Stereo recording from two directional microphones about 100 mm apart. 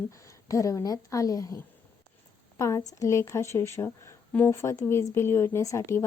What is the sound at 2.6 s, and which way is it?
A woman's voice, 35° left (ahead or behind).